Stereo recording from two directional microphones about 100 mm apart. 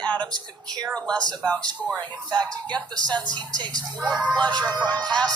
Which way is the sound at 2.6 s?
45° right (ahead or behind).